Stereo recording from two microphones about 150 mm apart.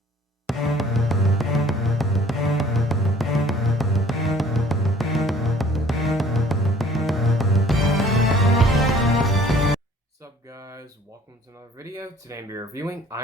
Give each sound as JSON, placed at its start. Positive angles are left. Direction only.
{"t": 0.4, "sound": "music", "side_deg": 0}
{"t": 10.5, "sound": "a sound", "side_deg": -20}
{"t": 11.8, "sound": "speech", "side_deg": -25}